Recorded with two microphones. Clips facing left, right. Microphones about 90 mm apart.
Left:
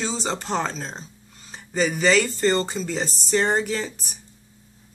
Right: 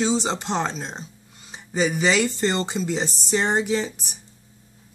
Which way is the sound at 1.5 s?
15° right (ahead or behind).